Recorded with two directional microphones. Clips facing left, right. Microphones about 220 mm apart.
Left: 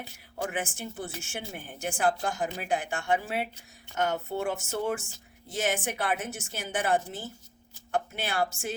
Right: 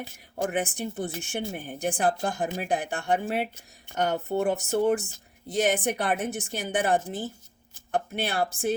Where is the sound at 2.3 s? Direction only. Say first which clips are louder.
Right 2 dB; 45° right (ahead or behind).